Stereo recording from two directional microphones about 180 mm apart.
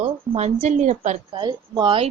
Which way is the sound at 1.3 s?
25° right (ahead or behind).